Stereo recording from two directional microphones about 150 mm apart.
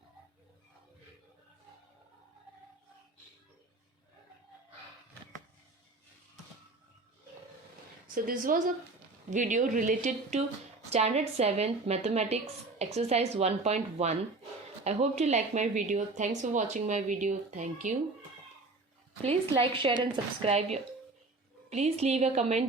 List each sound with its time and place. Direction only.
8.0 s a woman's voice: 65° right (ahead or behind)
19.2 s speech: 40° right (ahead or behind)